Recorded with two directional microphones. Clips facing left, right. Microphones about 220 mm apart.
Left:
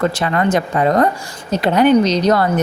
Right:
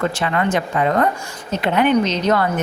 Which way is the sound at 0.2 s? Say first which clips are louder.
Left 3 dB; 40° left (ahead or behind).